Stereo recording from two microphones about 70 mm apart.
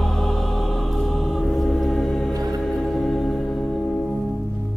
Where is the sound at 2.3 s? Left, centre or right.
Right.